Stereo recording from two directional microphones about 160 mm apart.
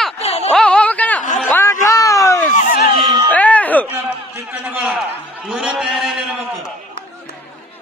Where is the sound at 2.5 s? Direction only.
50° left (ahead or behind).